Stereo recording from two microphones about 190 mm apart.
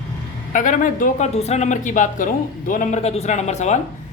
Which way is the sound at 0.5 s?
40° left (ahead or behind).